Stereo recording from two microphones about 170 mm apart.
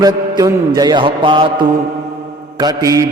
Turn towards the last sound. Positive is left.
turn(degrees=-20)  # may be behind; listen again after turning